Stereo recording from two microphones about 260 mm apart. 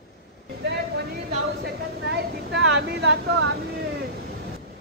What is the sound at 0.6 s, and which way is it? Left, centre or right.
Speech, right.